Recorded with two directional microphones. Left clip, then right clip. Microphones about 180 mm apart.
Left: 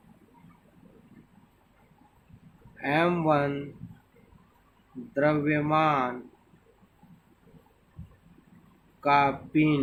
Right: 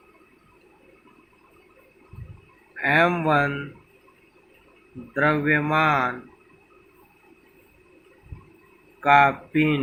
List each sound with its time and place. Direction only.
2.8 s a man's voice: 15° right (ahead or behind)
5.1 s a man's voice: 20° right (ahead or behind)
9.0 s a man's voice: 15° right (ahead or behind)